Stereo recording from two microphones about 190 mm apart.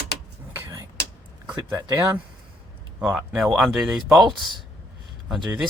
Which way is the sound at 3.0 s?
5° right (ahead or behind).